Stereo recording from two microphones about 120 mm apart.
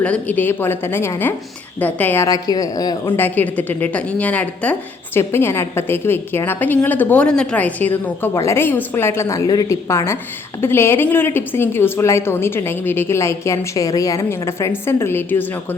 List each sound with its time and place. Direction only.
0.0 s a woman's voice: 10° left (ahead or behind)
2.2 s speech: 30° left (ahead or behind)
3.2 s a woman's voice: 15° left (ahead or behind)